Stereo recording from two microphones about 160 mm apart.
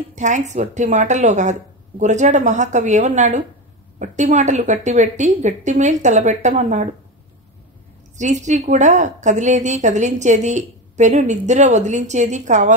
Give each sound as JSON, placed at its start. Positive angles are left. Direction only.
{"t": 0.1, "sound": "a woman's voice", "side_deg": -50}
{"t": 8.2, "sound": "a woman's voice", "side_deg": -50}